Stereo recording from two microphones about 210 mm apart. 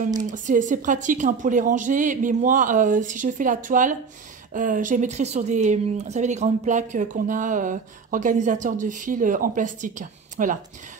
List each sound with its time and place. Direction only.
0.3 s speech: 35° right (ahead or behind)